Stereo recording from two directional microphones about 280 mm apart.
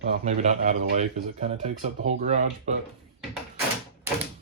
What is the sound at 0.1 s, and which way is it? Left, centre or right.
Speech, right.